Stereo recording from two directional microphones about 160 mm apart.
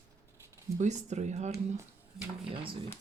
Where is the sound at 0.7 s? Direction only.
45° right (ahead or behind).